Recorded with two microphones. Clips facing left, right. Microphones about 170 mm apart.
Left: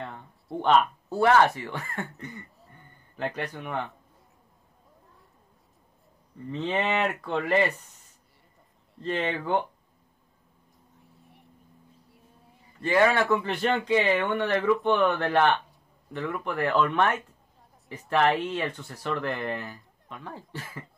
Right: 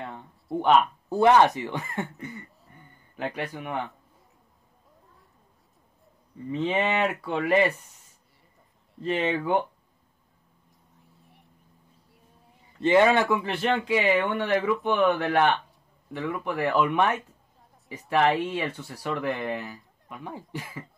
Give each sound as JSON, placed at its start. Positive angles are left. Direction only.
{"t": 0.0, "sound": "speech", "side_deg": -5}
{"t": 2.1, "sound": "a sound", "side_deg": -5}
{"t": 3.2, "sound": "speech", "side_deg": -10}
{"t": 6.5, "sound": "speech", "side_deg": -10}
{"t": 9.0, "sound": "speech", "side_deg": -5}
{"t": 11.0, "sound": "vehicle", "side_deg": 0}
{"t": 12.8, "sound": "speech", "side_deg": -20}
{"t": 13.4, "sound": "speech", "side_deg": 0}
{"t": 16.2, "sound": "speech", "side_deg": 0}
{"t": 20.2, "sound": "speech", "side_deg": -15}